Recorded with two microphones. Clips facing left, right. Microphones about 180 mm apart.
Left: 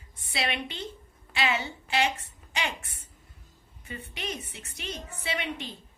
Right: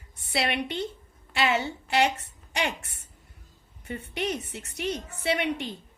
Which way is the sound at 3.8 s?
65° right (ahead or behind).